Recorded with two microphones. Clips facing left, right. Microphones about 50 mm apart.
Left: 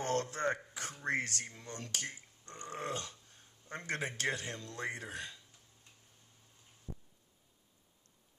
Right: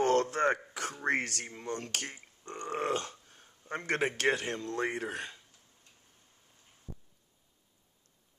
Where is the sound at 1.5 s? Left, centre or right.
Right.